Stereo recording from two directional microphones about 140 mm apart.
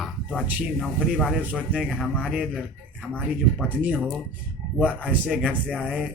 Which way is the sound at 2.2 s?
5° right (ahead or behind).